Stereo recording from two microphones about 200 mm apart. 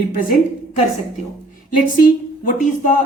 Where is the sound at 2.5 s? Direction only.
40° left (ahead or behind).